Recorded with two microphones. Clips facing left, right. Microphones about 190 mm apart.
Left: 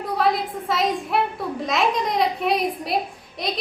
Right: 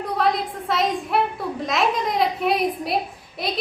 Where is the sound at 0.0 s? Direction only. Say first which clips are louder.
Even; centre (ahead or behind).